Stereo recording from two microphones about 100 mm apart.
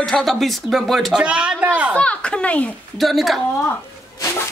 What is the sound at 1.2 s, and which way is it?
Speech, 10° right (ahead or behind).